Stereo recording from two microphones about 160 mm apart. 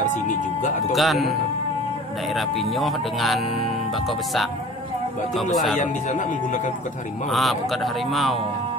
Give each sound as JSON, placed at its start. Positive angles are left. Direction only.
{"t": 0.0, "sound": "speech", "side_deg": 50}
{"t": 0.9, "sound": "speech", "side_deg": 0}
{"t": 2.3, "sound": "speech", "side_deg": 0}
{"t": 5.8, "sound": "speech", "side_deg": 50}
{"t": 7.2, "sound": "speech", "side_deg": 0}